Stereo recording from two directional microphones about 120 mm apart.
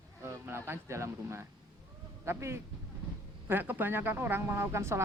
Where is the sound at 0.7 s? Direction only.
25° right (ahead or behind).